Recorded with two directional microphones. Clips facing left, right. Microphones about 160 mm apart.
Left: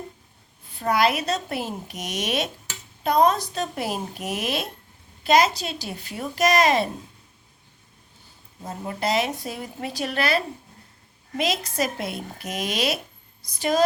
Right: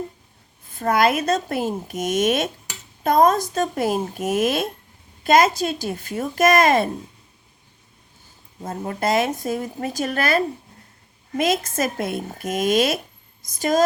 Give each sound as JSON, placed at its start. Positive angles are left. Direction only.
{"t": 0.7, "sound": "a woman's voice", "side_deg": -45}
{"t": 8.6, "sound": "a woman's voice", "side_deg": -50}